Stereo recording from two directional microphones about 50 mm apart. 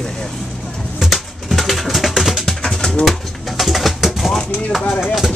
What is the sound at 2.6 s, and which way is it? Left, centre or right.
Bird, centre.